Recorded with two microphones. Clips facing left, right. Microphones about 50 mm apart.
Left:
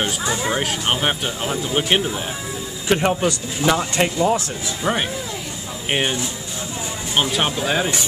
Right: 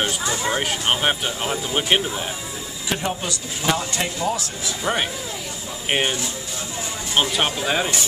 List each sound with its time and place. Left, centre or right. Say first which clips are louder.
0.3 s speech: left 2 dB; centre
0.6 s speech: left 1 dB; centre
2.9 s speech: left 7 dB; left
5.9 s speech: even; centre
7.2 s speech: left 1 dB; centre